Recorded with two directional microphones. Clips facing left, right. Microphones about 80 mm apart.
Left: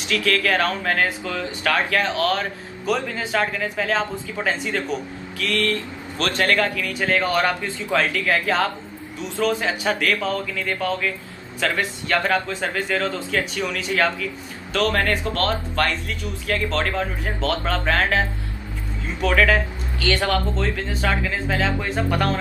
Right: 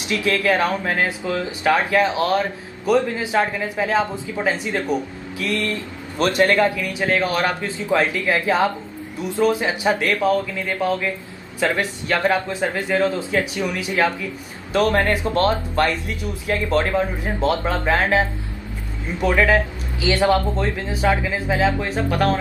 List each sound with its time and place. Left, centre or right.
0.1 s a man's voice: right
19.2 s speech: centre